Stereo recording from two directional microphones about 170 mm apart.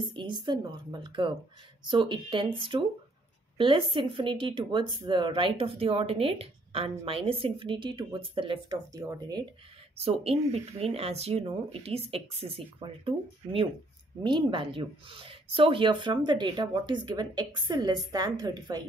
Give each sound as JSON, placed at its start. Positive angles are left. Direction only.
{"t": 0.0, "sound": "speech", "side_deg": -30}
{"t": 9.9, "sound": "speech", "side_deg": -35}